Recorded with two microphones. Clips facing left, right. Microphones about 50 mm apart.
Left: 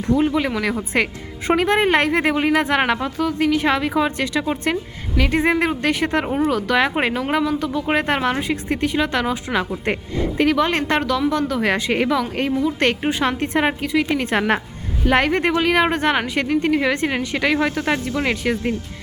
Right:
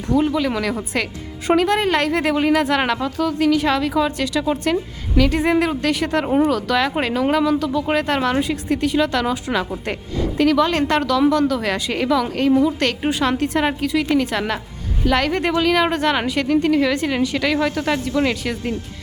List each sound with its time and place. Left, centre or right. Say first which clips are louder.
0.0 s speech: even; centre
14.3 s a woman's voice: left 4 dB; left
15.0 s speech: left 1 dB; left